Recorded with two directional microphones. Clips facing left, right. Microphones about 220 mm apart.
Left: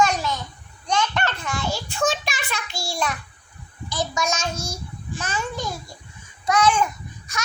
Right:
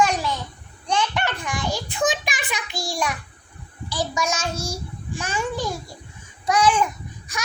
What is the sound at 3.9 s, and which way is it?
Speech, 10° right (ahead or behind).